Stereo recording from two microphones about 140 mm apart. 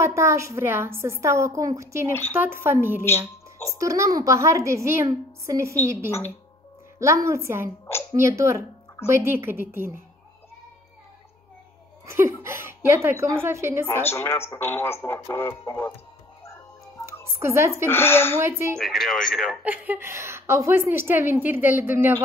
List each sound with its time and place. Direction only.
0.0 s a woman's voice: 20° right (ahead or behind)
3.1 s a woman's voice: 20° left (ahead or behind)
3.7 s a woman's voice: 20° right (ahead or behind)
12.1 s a woman's voice: 20° right (ahead or behind)
14.0 s speech: 15° left (ahead or behind)
17.4 s a woman's voice: 20° right (ahead or behind)
17.8 s speech: 15° left (ahead or behind)
18.4 s a woman's voice: 15° right (ahead or behind)
18.8 s speech: centre (ahead or behind)
19.6 s a woman's voice: 10° right (ahead or behind)